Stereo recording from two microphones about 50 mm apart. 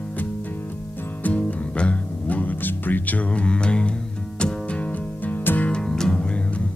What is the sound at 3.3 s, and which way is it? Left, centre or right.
Mantra, left.